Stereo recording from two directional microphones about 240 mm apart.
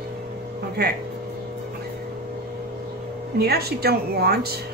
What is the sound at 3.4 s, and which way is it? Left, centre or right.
Speech, right.